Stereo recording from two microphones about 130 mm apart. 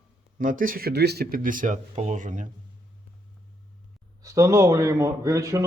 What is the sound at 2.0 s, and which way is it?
Speech, 70° right (ahead or behind).